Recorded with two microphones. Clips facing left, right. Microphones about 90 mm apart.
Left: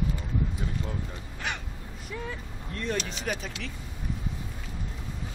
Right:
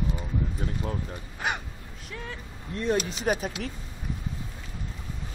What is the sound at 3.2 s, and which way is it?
Speech, 40° right (ahead or behind).